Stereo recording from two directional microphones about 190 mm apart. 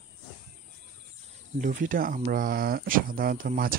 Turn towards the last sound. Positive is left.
turn(degrees=-50)  # may be behind; listen again after turning